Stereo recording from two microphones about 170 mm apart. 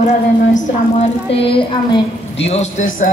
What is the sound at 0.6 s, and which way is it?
A woman's voice, 40° left (ahead or behind).